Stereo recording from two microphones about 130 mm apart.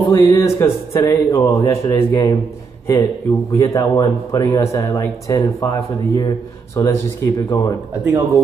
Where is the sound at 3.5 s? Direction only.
25° left (ahead or behind).